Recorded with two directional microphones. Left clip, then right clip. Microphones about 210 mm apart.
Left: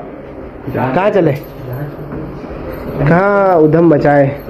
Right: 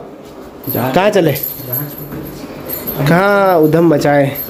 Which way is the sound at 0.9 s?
30° right (ahead or behind).